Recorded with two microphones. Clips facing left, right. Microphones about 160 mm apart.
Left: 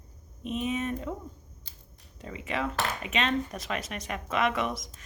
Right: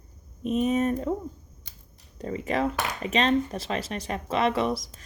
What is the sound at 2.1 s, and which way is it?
A woman's voice, 40° right (ahead or behind).